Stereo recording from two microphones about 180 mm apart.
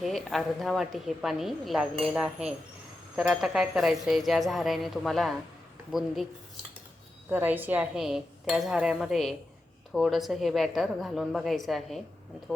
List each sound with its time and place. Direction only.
0.0 s speech: centre (ahead or behind)
7.3 s speech: 10° right (ahead or behind)